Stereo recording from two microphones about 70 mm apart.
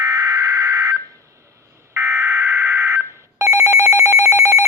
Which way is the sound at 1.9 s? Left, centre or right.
Right.